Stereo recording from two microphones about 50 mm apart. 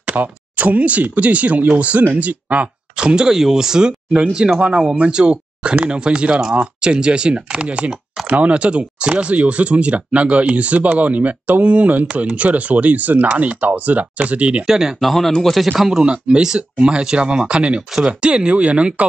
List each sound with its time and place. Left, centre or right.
0.0 s speech: right
3.0 s speech: centre
14.7 s speech: centre
15.0 s speech: centre; by 19.0 s right